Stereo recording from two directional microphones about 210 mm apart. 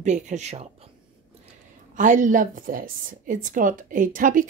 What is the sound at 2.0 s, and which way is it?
Speech, 40° right (ahead or behind).